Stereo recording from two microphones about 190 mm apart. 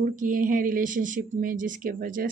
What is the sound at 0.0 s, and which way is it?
Speech, 45° right (ahead or behind).